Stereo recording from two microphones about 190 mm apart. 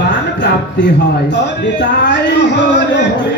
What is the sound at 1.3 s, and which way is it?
Speech, 65° left (ahead or behind).